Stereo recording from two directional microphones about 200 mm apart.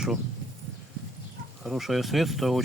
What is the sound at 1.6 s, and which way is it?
Speech, centre (ahead or behind).